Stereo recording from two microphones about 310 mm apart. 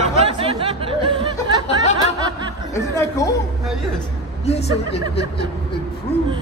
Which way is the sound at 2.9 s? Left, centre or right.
Centre.